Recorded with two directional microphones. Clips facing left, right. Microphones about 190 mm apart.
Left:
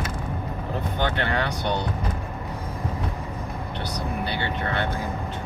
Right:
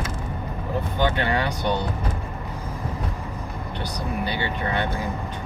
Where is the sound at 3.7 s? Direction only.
65° left (ahead or behind).